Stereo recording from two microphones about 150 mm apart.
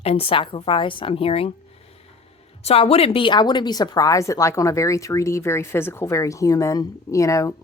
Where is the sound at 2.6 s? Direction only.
40° left (ahead or behind).